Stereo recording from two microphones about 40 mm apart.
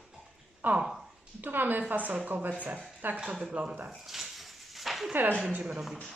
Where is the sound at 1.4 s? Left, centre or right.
Right.